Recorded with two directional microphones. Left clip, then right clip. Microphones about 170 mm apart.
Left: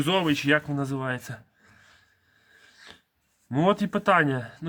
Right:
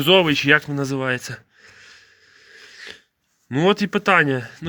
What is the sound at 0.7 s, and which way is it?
Speech, 20° right (ahead or behind).